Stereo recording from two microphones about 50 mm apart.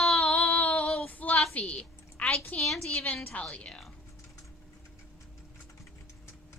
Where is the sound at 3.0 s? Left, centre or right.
Left.